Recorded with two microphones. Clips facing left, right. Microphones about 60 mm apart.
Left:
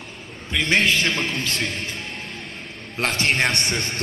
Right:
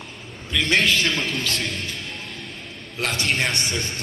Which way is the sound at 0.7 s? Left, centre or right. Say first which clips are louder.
Left 1 dB; right.